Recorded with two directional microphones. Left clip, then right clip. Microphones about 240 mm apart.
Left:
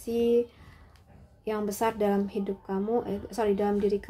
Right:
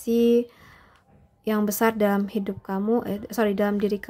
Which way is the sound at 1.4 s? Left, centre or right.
Right.